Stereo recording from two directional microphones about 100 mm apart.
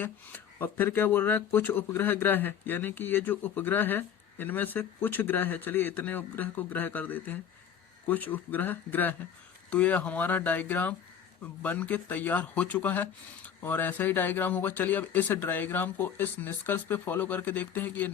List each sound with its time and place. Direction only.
0.0 s speech: 20° left (ahead or behind)